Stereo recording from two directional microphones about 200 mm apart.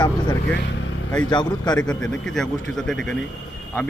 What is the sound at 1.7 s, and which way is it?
Speech, 5° left (ahead or behind).